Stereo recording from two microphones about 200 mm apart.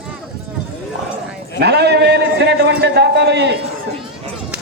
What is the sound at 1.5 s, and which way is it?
A man's voice, 55° right (ahead or behind).